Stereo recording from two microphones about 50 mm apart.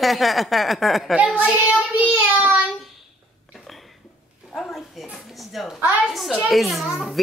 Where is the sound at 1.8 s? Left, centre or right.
Right.